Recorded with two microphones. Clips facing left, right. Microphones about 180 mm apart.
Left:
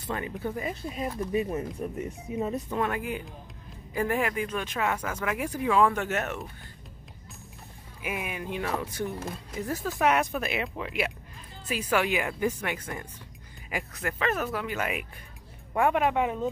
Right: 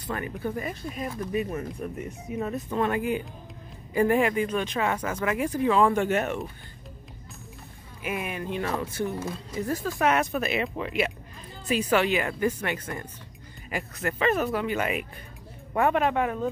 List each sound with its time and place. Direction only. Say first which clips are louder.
0.0 s speech: right 1 dB; 20° left (ahead or behind)
0.3 s speech: right 1 dB; centre (ahead or behind)
0.6 s speech: even; 20° left (ahead or behind)
2.8 s speech: right 6 dB; centre (ahead or behind)
5.3 s speech: right 2 dB; 5° left (ahead or behind)
8.0 s speech: right 3 dB; 10° left (ahead or behind)
12.4 s speech: right 2 dB; centre (ahead or behind)
12.8 s speech: right 2 dB; 15° left (ahead or behind)
14.1 s speech: right 5 dB; 5° right (ahead or behind); by 16.4 s 15° left (ahead or behind)